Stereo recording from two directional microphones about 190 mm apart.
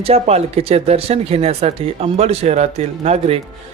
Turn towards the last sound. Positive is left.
turn(degrees=-35)  # may be behind; listen again after turning